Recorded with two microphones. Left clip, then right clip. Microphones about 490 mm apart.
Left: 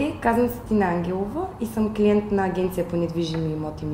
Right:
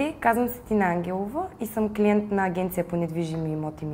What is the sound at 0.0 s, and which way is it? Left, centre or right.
A woman's voice, right.